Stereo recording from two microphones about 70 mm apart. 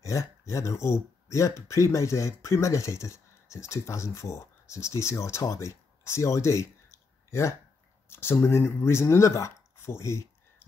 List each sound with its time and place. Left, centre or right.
0.0 s speech: left